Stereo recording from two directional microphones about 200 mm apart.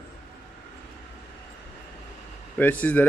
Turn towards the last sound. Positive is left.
turn(degrees=10)  # may be behind; listen again after turning